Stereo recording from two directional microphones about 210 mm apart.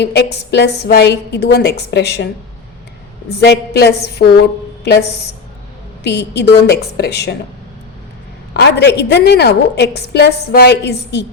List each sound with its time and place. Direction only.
0.0 s a woman's voice: 50° left (ahead or behind)
8.5 s a woman's voice: 55° left (ahead or behind)